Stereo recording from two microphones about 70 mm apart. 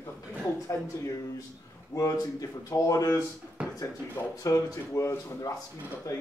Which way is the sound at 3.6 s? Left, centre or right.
Centre.